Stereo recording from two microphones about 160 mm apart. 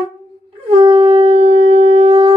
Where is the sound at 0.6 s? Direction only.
35° right (ahead or behind).